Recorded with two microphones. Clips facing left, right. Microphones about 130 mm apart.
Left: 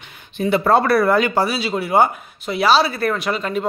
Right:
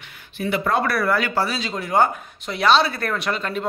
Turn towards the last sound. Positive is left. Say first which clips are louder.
# left 3 dB
turn(degrees=5)  # may be behind; listen again after turning